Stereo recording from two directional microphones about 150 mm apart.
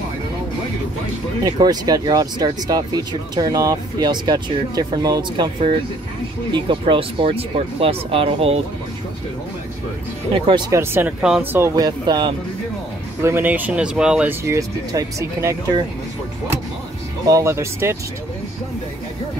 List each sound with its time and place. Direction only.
1.4 s speech: 25° right (ahead or behind)
6.5 s speech: 35° right (ahead or behind)
10.7 s speech: 15° right (ahead or behind)
11.5 s speech: 20° right (ahead or behind)
13.2 s speech: 15° right (ahead or behind)
14.4 s speech: 20° right (ahead or behind)
17.3 s speech: 20° right (ahead or behind)